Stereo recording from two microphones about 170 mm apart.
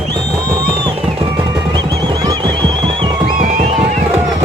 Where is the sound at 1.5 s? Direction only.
20° right (ahead or behind).